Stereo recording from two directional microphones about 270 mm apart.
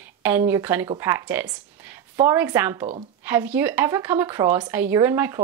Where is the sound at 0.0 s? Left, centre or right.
Centre.